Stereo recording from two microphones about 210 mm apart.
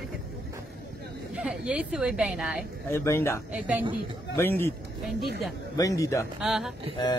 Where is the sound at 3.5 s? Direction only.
5° right (ahead or behind).